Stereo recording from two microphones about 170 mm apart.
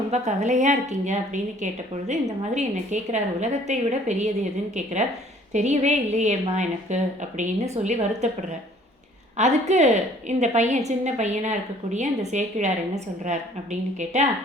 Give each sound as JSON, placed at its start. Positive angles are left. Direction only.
{"t": 0.1, "sound": "a woman's voice", "side_deg": -40}
{"t": 5.5, "sound": "a woman's voice", "side_deg": -40}
{"t": 9.4, "sound": "a woman's voice", "side_deg": -40}